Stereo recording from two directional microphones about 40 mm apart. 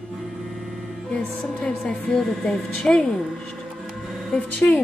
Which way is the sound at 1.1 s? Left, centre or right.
Left.